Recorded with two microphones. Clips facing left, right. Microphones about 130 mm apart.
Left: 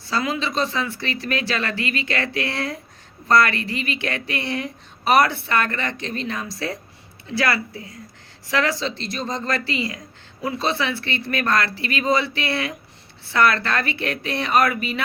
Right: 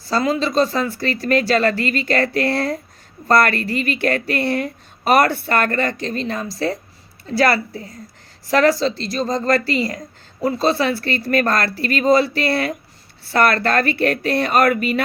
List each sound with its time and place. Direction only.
0.1 s speech: 40° right (ahead or behind)